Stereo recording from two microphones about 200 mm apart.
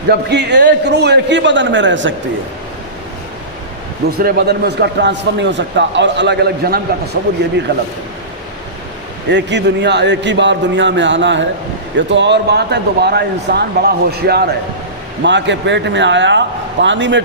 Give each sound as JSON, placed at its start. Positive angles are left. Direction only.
{"t": 0.1, "sound": "a man's voice", "side_deg": -60}
{"t": 4.2, "sound": "a man's voice", "side_deg": -50}
{"t": 9.3, "sound": "a man's voice", "side_deg": -60}